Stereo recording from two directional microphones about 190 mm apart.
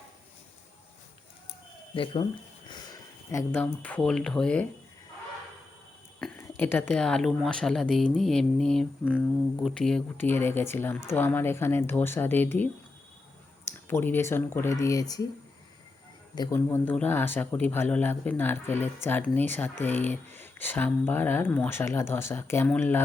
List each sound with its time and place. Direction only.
1.9 s speech: 25° left (ahead or behind); by 4.6 s 5° left (ahead or behind)
6.1 s speech: 5° left (ahead or behind)
13.7 s speech: 10° left (ahead or behind)
16.3 s speech: 15° left (ahead or behind)